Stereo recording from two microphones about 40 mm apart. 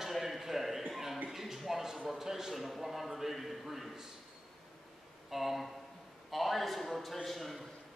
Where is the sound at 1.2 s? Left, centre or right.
Centre.